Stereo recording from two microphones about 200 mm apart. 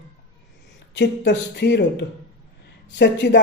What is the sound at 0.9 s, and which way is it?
Speech, 60° left (ahead or behind).